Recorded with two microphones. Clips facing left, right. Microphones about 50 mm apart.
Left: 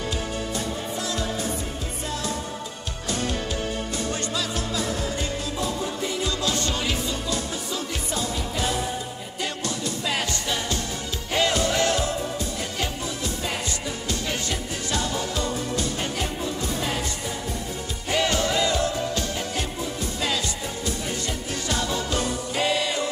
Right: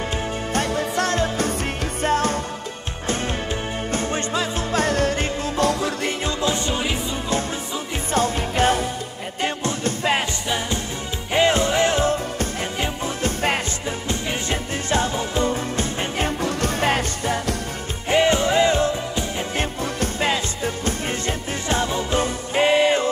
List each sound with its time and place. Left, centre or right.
0.5 s music: right
1.1 s music: right
3.9 s music: right
4.7 s music: right
5.6 s music: right
6.2 s music: right
8.1 s music: right
9.4 s music: right
11.3 s music: right
13.2 s music: right
14.0 s music: right
16.4 s music: right
18.0 s music: right
20.2 s music: right